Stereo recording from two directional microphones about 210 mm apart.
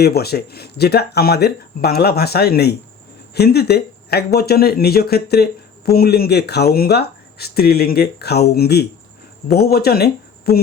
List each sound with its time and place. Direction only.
0.0 s speech: 50° left (ahead or behind)